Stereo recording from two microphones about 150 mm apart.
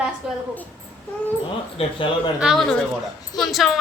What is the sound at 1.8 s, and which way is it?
Speech, 40° left (ahead or behind).